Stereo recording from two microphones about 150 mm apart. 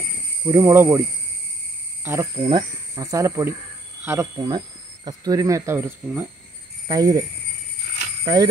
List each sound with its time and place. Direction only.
0.5 s speech: 20° right (ahead or behind)
2.0 s speech: 20° right (ahead or behind)